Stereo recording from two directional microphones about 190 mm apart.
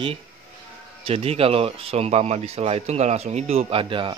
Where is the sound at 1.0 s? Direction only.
30° right (ahead or behind).